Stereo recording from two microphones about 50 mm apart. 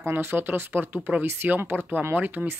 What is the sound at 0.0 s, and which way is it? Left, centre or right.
Speech, right.